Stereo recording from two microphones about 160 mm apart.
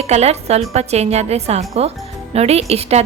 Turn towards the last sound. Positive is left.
turn(degrees=-40)  # may be behind; listen again after turning